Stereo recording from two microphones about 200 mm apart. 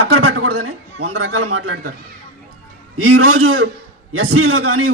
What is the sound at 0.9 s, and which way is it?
Speech, 90° right.